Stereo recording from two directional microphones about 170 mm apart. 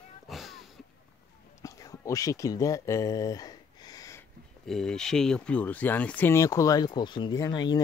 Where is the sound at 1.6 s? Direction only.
20° left (ahead or behind).